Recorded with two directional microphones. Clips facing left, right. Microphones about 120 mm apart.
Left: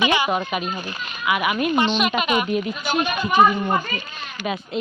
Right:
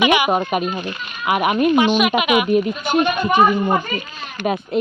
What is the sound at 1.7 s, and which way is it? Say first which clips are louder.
Speech: right 5 dB; 10° right (ahead or behind).